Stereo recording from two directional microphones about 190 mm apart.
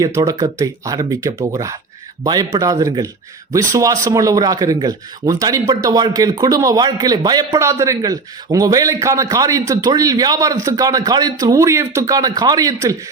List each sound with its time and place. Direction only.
0.0 s speech: 20° right (ahead or behind)